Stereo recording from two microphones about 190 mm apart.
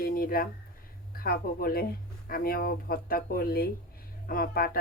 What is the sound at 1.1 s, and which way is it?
Speech, 50° left (ahead or behind).